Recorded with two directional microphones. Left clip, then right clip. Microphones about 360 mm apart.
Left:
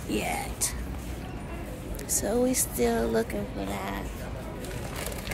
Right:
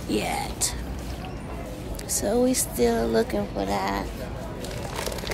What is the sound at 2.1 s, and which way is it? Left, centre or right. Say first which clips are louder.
Speech: right 3 dB; centre.